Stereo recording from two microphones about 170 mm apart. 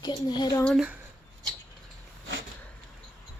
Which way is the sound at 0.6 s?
5° left (ahead or behind).